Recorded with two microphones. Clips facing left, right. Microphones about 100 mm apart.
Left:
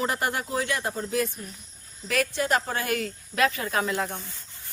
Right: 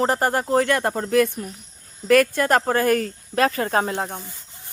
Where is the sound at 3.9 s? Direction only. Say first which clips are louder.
Right 2 dB; 30° right (ahead or behind).